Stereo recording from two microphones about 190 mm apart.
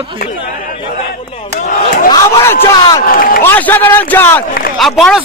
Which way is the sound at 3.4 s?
10° left (ahead or behind).